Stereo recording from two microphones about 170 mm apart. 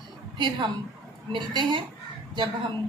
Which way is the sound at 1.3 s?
30° right (ahead or behind).